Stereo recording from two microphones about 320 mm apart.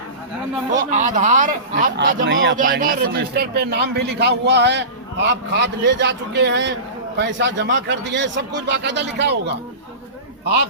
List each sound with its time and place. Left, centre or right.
0.9 s a man's voice: right